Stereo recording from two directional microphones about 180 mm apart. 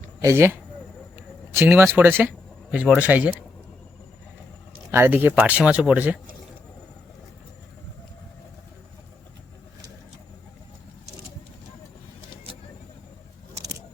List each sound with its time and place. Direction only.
0.2 s speech: 15° right (ahead or behind)
4.9 s speech: 15° right (ahead or behind)